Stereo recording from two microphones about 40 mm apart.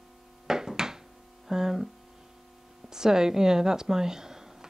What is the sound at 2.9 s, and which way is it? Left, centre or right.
Speech, centre.